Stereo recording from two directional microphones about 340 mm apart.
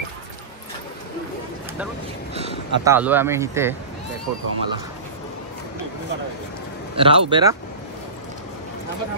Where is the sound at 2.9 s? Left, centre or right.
Centre.